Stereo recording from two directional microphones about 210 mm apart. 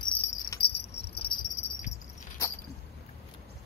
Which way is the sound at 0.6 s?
50° left (ahead or behind).